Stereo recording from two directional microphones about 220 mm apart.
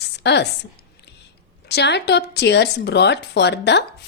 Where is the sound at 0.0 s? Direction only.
50° left (ahead or behind).